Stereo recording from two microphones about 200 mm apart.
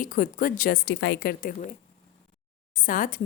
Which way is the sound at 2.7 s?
45° left (ahead or behind).